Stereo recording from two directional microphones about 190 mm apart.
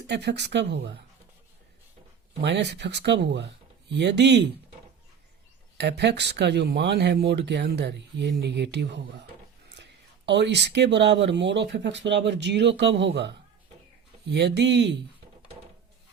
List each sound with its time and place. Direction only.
0.1 s speech: 60° right (ahead or behind)
2.4 s speech: 65° right (ahead or behind)
5.7 s speech: 60° right (ahead or behind)